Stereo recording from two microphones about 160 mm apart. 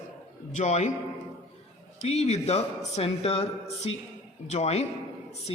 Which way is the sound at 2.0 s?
40° left (ahead or behind).